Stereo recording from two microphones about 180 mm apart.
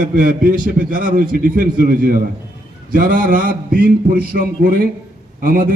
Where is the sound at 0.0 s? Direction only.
50° right (ahead or behind).